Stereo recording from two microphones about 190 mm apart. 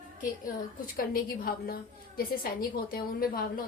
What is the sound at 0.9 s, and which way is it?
A woman's voice, 50° left (ahead or behind).